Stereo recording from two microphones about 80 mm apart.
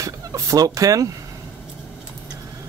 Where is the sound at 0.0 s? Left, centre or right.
Right.